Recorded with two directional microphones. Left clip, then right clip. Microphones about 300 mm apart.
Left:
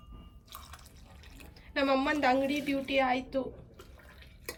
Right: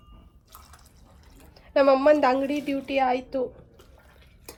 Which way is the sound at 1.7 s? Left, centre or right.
Centre.